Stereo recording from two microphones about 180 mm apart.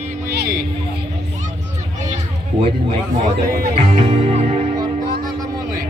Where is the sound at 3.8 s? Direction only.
40° right (ahead or behind).